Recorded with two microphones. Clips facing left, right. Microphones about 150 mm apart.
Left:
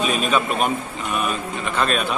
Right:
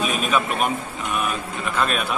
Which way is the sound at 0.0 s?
5° right (ahead or behind).